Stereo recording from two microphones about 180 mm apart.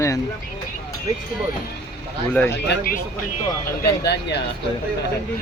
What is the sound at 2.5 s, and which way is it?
Speech, 60° left (ahead or behind).